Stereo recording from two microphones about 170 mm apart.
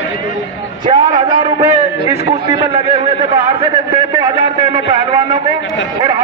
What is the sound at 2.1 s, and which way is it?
A man's voice, 35° right (ahead or behind).